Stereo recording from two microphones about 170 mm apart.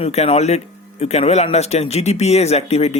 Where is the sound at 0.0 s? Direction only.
40° left (ahead or behind).